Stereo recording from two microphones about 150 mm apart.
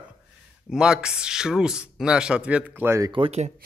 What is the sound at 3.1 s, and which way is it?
Speech, 40° right (ahead or behind).